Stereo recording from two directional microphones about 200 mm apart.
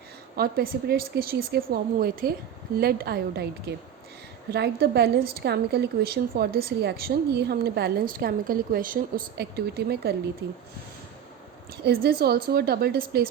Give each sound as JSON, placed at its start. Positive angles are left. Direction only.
{"t": 0.3, "sound": "a woman's voice", "side_deg": -50}
{"t": 11.8, "sound": "a woman's voice", "side_deg": -55}